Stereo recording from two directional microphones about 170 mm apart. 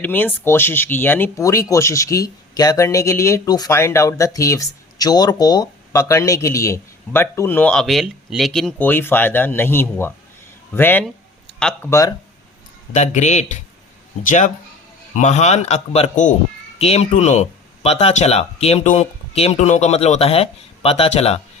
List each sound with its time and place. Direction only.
0.0 s speech: 10° left (ahead or behind)
12.9 s speech: 45° left (ahead or behind)